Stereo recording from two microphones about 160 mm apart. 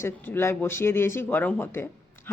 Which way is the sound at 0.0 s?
15° left (ahead or behind).